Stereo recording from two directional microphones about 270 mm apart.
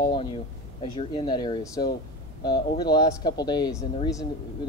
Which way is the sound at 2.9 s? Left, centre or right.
Centre.